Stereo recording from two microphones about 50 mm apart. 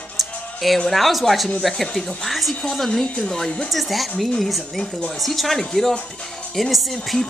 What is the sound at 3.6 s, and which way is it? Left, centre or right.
Speech, centre.